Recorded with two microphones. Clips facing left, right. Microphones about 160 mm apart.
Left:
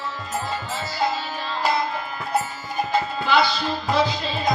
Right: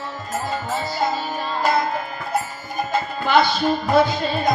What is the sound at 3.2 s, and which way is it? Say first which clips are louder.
Music: right 5 dB; 50° right (ahead or behind).